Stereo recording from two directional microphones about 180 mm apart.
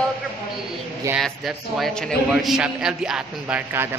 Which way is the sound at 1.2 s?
Centre (ahead or behind).